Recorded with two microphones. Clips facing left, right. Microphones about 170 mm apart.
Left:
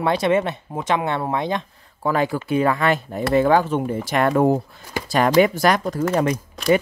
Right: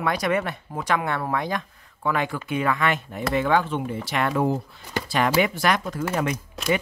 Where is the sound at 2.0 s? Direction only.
35° left (ahead or behind).